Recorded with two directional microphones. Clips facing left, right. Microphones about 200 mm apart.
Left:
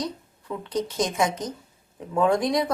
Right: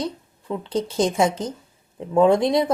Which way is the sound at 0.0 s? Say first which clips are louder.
Right 3 dB; 25° right (ahead or behind).